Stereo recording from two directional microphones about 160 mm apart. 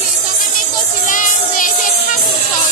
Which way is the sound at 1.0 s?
55° left (ahead or behind).